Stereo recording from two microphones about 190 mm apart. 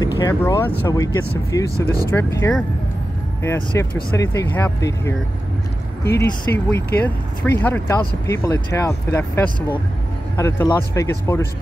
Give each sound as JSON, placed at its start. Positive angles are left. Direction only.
{"t": 0.0, "sound": "speech", "side_deg": 15}
{"t": 6.0, "sound": "speech", "side_deg": 60}
{"t": 7.0, "sound": "speech", "side_deg": 10}